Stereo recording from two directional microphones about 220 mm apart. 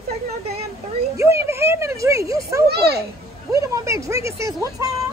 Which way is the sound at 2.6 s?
45° right (ahead or behind).